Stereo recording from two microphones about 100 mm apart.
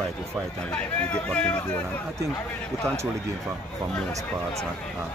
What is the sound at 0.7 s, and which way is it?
Speech, 10° left (ahead or behind).